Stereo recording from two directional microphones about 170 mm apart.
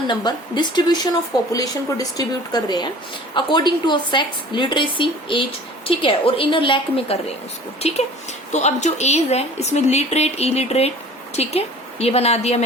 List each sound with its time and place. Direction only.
0.1 s a woman's voice: 25° left (ahead or behind)